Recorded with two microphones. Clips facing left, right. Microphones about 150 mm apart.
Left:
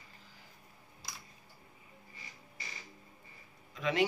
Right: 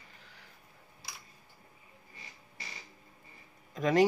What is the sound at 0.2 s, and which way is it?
Vehicle, 70° right (ahead or behind).